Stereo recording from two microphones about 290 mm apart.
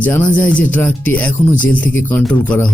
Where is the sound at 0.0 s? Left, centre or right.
Centre.